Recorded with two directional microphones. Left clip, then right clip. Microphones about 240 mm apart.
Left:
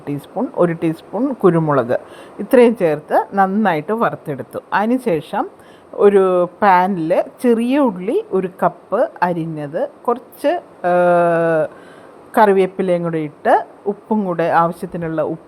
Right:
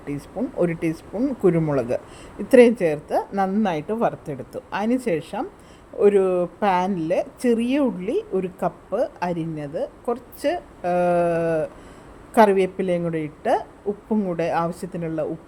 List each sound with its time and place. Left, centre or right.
1.2 s a woman's voice: centre